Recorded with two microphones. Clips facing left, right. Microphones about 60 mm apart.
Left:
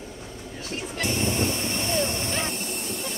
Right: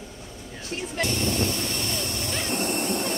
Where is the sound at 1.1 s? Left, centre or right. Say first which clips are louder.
Left 3 dB; left.